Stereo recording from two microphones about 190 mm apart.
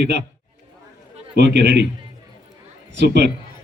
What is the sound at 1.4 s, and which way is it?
Speech, 65° right (ahead or behind).